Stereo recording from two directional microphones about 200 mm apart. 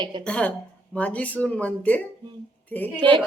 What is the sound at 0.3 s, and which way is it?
Speech, 5° left (ahead or behind).